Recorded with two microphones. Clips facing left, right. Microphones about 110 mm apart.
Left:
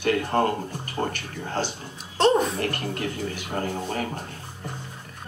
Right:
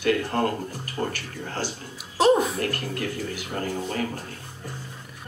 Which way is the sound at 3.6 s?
25° left (ahead or behind).